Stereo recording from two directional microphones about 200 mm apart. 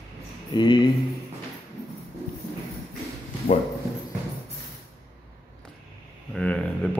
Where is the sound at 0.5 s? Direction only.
25° left (ahead or behind).